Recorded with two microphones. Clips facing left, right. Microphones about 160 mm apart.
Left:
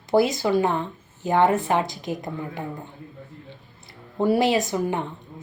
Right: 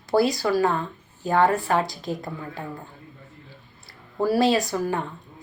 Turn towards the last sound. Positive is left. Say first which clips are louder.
# left 1 dB
turn(degrees=20)  # may be behind; listen again after turning